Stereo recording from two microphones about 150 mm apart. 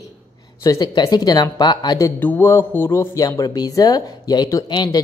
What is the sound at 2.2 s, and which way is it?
Speech, 15° left (ahead or behind).